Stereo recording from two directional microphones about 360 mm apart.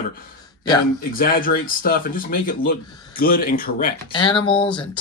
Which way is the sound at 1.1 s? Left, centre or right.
Left.